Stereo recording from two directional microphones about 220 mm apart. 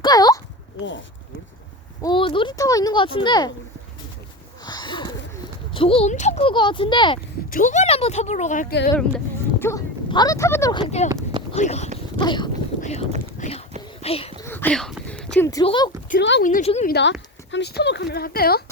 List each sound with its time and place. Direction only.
0.0 s speech: 15° left (ahead or behind)
0.8 s speech: 55° left (ahead or behind)
2.0 s speech: 20° left (ahead or behind)
4.6 s a sound: 20° left (ahead or behind)
5.7 s speech: 25° left (ahead or behind)
7.5 s speech: 35° left (ahead or behind)
9.0 s speech: 5° left (ahead or behind)
11.1 s a sound: 15° right (ahead or behind)
11.5 s speech: 30° left (ahead or behind)
12.1 s dog: 20° left (ahead or behind)
14.0 s speech: 25° left (ahead or behind)
14.4 s speech: 10° left (ahead or behind)
16.4 s speech: 35° left (ahead or behind)
16.9 s speech: 55° left (ahead or behind)